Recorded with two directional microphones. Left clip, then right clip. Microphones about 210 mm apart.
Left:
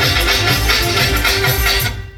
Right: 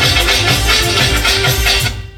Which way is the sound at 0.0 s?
15° right (ahead or behind).